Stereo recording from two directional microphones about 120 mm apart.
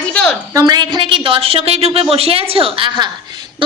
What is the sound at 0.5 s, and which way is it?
A woman's voice, 35° right (ahead or behind).